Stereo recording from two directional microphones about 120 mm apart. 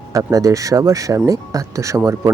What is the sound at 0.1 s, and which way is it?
Speech, 30° right (ahead or behind).